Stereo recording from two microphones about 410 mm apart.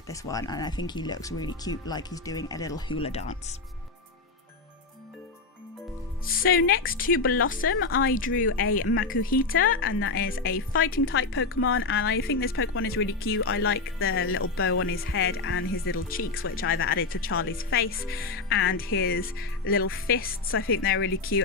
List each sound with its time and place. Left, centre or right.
0.1 s speech: centre
6.2 s speech: left
7.7 s speech: left